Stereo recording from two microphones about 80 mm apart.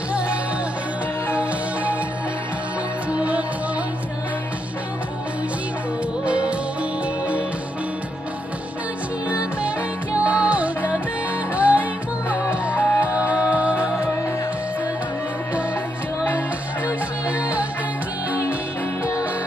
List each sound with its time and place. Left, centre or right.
1.3 s music: centre
3.1 s music: centre
6.2 s music: centre
9.3 s music: centre
16.3 s music: centre